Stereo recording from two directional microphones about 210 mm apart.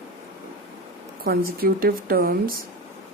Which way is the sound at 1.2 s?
45° right (ahead or behind).